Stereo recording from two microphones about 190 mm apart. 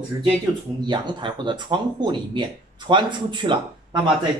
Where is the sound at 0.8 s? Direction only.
25° right (ahead or behind).